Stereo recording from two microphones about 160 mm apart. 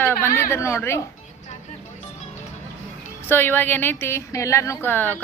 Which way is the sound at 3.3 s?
15° left (ahead or behind).